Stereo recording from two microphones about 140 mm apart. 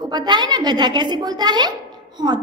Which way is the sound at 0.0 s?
30° right (ahead or behind).